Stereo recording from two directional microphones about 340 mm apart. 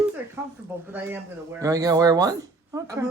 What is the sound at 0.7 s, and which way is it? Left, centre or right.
Speech, centre.